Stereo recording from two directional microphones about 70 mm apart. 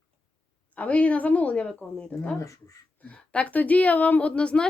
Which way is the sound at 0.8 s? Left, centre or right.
Left.